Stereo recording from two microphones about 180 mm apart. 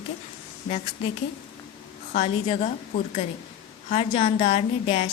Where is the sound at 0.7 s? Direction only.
35° left (ahead or behind).